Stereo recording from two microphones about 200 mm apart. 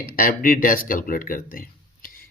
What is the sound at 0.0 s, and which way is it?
Speech, 45° left (ahead or behind).